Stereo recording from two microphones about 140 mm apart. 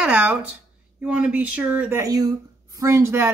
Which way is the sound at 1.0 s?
10° right (ahead or behind).